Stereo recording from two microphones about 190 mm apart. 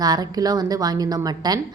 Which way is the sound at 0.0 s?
20° right (ahead or behind).